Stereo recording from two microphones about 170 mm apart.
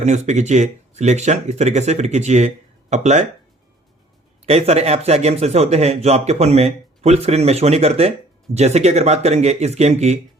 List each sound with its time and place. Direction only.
0.0 s speech: 45° right (ahead or behind)
4.4 s a man's voice: 40° right (ahead or behind)